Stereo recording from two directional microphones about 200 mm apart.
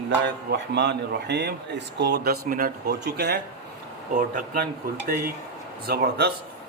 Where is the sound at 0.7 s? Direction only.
60° right (ahead or behind).